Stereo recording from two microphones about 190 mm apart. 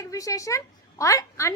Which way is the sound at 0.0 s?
15° left (ahead or behind).